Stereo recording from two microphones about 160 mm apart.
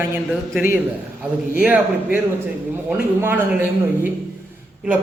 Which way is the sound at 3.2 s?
15° right (ahead or behind).